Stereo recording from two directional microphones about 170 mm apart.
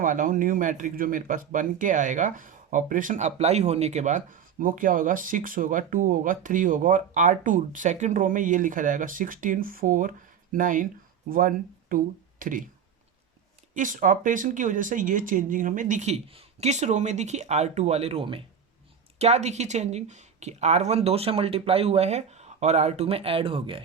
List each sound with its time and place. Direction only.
0.0 s speech: 50° right (ahead or behind)
13.7 s speech: 50° right (ahead or behind); by 23.8 s 30° right (ahead or behind)